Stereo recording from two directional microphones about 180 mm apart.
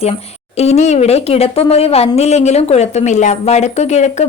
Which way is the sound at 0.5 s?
35° left (ahead or behind).